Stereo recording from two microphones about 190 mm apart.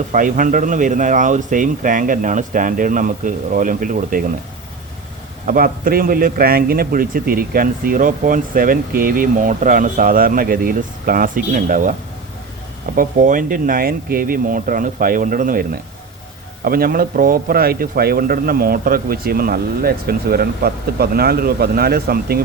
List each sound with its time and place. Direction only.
0.1 s a man's voice: 45° right (ahead or behind)
5.5 s a man's voice: 50° right (ahead or behind)
13.0 s a man's voice: 45° right (ahead or behind)